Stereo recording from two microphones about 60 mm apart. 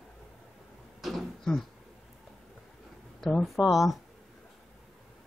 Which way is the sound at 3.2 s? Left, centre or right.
Centre.